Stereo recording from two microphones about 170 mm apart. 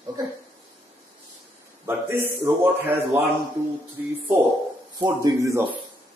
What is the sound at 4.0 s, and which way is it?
Speech, 10° right (ahead or behind).